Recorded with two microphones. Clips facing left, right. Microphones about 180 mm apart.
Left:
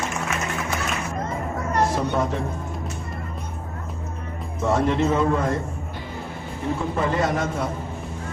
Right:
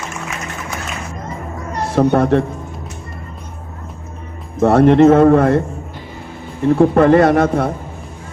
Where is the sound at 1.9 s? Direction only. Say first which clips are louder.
Right 11 dB; 65° right (ahead or behind).